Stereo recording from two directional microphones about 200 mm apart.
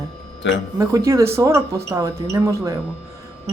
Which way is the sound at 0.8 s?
15° right (ahead or behind).